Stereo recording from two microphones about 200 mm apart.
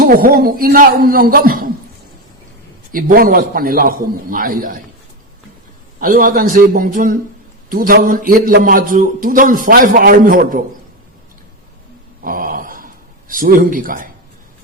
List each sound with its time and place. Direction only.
0.0 s a man's voice: 45° right (ahead or behind)
2.9 s a man's voice: 45° right (ahead or behind)
6.0 s a man's voice: 45° right (ahead or behind)
12.2 s a sound: 45° right (ahead or behind)